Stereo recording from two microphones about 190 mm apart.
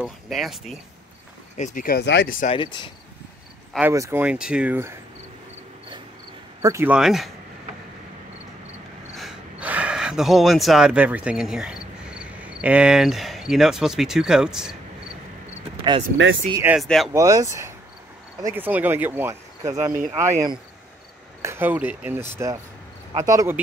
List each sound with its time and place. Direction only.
0.0 s speech: centre (ahead or behind)
1.6 s speech: 40° left (ahead or behind)
2.5 s speech: 25° left (ahead or behind)
3.9 s speech: 15° right (ahead or behind)
6.6 s speech: 15° right (ahead or behind)
9.1 s speech: centre (ahead or behind)
16.5 s speech: 10° right (ahead or behind)
16.8 s speech: centre (ahead or behind)
17.1 s speech: 15° right (ahead or behind)
21.4 s speech: 10° right (ahead or behind)